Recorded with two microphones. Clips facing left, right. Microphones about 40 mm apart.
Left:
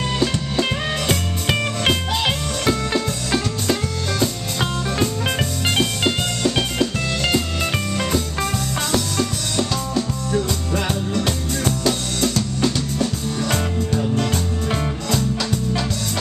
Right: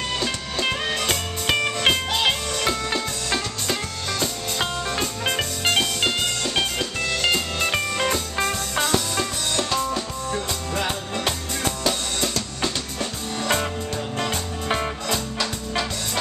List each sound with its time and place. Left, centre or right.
0.2 s music: centre
11.2 s drum kit: centre
14.7 s music: centre